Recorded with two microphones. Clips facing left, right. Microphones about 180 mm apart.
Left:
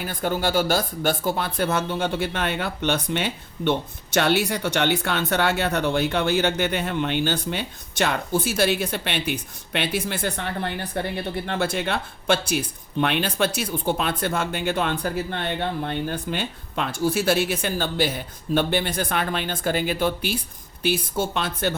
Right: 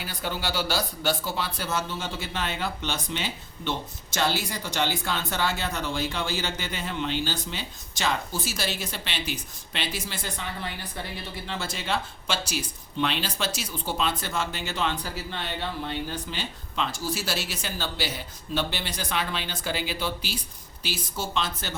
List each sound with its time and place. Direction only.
0.0 s speech: 50° left (ahead or behind)